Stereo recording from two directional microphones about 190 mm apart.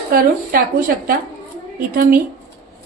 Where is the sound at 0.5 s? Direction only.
50° right (ahead or behind).